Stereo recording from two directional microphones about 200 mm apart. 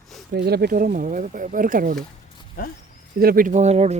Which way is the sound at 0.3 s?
55° right (ahead or behind).